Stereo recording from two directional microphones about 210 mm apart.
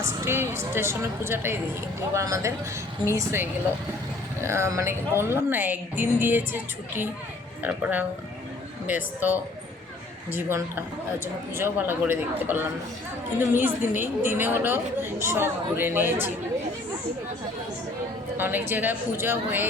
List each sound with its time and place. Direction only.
0.0 s a woman's voice: 10° right (ahead or behind)
4.4 s a woman's voice: 15° right (ahead or behind)
18.3 s a woman's voice: 10° right (ahead or behind)